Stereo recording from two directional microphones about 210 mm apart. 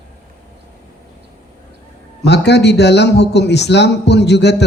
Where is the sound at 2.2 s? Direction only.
55° left (ahead or behind).